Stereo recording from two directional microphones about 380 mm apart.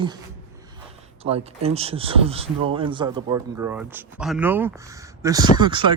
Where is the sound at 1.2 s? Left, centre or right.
Centre.